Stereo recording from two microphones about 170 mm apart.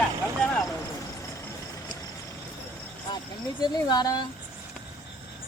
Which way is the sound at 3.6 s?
25° left (ahead or behind).